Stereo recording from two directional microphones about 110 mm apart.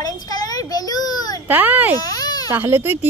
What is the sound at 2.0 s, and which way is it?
Baby cry, 35° left (ahead or behind).